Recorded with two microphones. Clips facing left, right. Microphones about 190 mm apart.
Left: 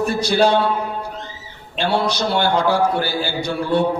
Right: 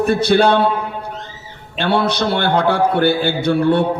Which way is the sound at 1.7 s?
60° right (ahead or behind).